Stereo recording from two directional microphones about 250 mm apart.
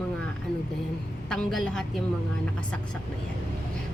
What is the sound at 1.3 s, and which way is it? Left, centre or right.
Speech, centre.